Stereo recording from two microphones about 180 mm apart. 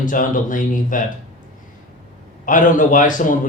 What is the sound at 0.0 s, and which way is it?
A man's voice, 45° left (ahead or behind).